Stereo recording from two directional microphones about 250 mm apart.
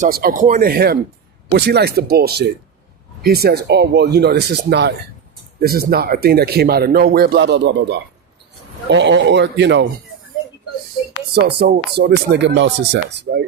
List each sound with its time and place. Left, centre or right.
0.0 s speech: right
11.3 s speech: right